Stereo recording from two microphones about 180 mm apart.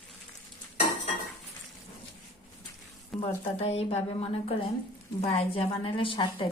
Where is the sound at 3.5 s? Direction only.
35° left (ahead or behind).